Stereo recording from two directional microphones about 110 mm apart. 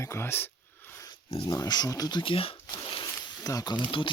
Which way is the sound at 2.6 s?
45° left (ahead or behind).